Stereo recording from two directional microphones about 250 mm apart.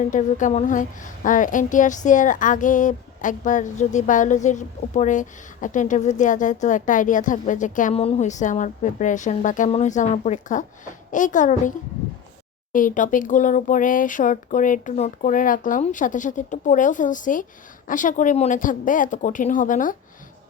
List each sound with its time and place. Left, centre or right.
0.1 s speech: left
12.7 s speech: left